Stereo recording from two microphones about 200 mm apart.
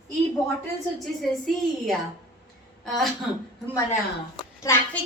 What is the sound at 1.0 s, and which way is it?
A woman's voice, centre (ahead or behind).